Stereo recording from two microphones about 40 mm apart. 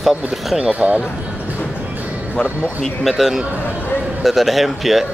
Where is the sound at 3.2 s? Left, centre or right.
Centre.